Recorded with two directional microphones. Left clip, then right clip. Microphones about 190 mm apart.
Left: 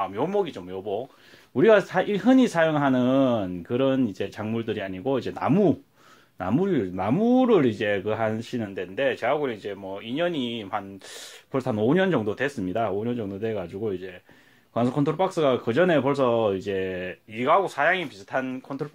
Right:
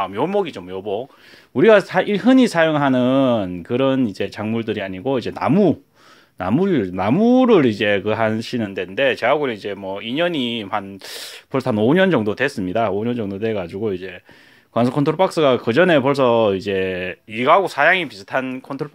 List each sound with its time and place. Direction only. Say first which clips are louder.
0.0 s speech: right 5 dB; 35° right (ahead or behind)